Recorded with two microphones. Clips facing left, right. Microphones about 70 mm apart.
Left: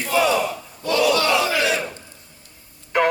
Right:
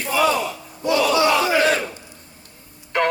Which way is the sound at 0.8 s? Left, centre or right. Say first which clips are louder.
Right 1 dB; right.